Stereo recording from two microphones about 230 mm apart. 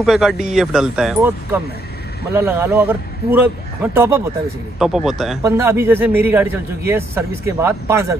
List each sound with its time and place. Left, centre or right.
0.0 s a man's voice: centre